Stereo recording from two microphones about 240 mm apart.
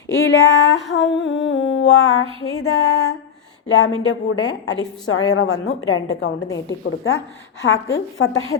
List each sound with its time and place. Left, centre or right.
0.1 s female singing: left
2.5 s a woman's voice: left
6.7 s female singing: left